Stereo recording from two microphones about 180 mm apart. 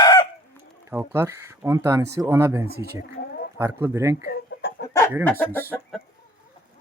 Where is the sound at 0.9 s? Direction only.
10° right (ahead or behind).